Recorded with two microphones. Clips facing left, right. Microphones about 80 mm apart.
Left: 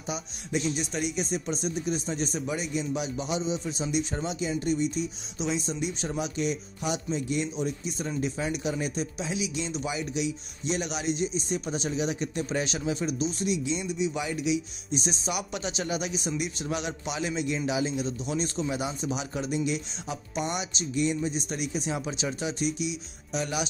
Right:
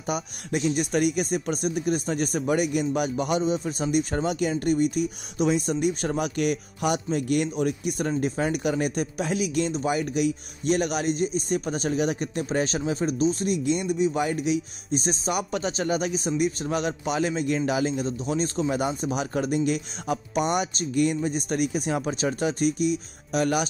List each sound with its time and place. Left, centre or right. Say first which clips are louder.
0.0 s speech: right 6 dB; right